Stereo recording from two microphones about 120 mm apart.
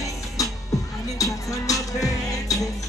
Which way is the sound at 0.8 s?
30° left (ahead or behind).